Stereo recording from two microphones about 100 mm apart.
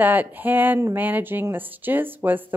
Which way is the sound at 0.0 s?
20° right (ahead or behind).